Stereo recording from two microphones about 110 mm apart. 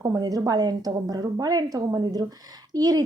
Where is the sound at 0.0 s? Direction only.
30° right (ahead or behind).